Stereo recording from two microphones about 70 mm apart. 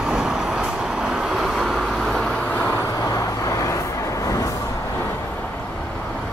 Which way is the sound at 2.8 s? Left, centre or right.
Left.